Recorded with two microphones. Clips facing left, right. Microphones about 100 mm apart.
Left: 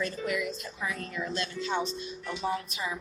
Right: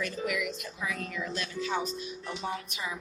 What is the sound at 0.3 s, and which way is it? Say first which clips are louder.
Speech: left 1 dB; 30° left (ahead or behind).